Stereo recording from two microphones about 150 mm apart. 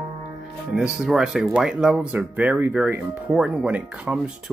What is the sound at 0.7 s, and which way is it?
Speech, 5° right (ahead or behind).